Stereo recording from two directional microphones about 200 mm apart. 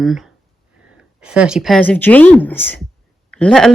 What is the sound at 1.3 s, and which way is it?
Speech, 5° right (ahead or behind).